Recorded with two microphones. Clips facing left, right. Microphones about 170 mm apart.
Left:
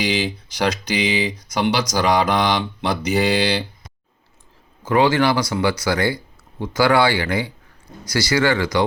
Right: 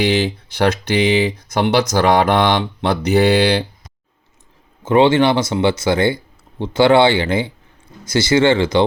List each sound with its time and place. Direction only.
0.5 s mantra: 55° right (ahead or behind)
4.8 s speech: 25° right (ahead or behind)